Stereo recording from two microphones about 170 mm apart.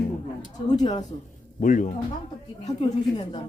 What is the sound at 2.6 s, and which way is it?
Speech, 35° left (ahead or behind).